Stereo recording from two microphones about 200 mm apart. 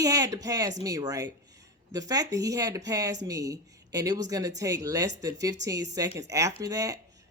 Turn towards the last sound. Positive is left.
turn(degrees=-15)  # may be behind; listen again after turning